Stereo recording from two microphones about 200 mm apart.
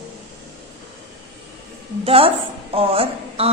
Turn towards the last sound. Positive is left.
turn(degrees=-30)  # may be behind; listen again after turning